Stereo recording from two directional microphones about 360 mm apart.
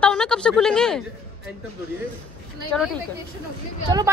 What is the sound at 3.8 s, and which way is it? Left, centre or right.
Speech, centre.